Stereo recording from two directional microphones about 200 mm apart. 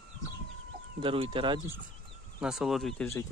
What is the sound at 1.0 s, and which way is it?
Speech, 25° right (ahead or behind).